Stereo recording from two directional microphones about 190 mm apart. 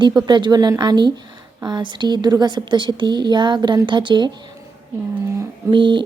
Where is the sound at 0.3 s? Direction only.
25° right (ahead or behind).